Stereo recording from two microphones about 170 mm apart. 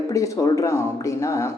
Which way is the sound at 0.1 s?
20° left (ahead or behind).